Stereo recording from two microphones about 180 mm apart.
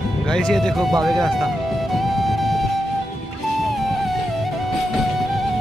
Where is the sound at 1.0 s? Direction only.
Centre (ahead or behind).